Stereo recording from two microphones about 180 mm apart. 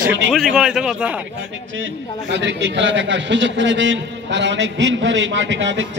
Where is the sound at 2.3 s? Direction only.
80° right.